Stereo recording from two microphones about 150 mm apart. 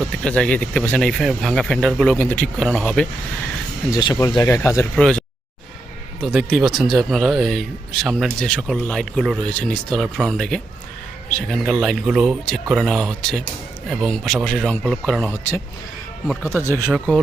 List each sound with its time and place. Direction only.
0.0 s speech: 5° left (ahead or behind)
3.8 s speech: 25° left (ahead or behind)
4.9 s speech: 5° left (ahead or behind)
6.2 s speech: centre (ahead or behind)
15.3 s speech: 15° left (ahead or behind)
16.2 s speech: centre (ahead or behind)
16.6 s speech: 15° left (ahead or behind)